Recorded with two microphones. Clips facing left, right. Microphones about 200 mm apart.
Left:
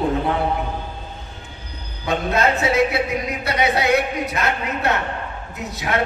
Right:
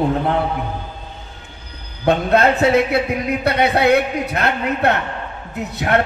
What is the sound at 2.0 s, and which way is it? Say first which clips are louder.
A man's voice: right 5 dB; 60° right (ahead or behind).